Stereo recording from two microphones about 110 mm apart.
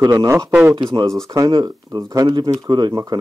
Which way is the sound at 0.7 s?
45° right (ahead or behind).